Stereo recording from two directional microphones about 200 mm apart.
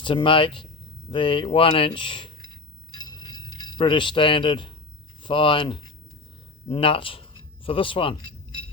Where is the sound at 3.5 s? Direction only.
20° left (ahead or behind).